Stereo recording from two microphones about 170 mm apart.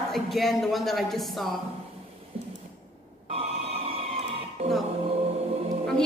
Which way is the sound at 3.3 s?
35° right (ahead or behind).